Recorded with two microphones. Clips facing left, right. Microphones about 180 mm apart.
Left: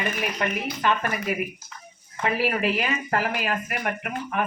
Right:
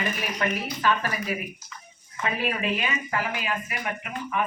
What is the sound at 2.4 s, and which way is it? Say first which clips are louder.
Speech: left 3 dB; 40° left (ahead or behind).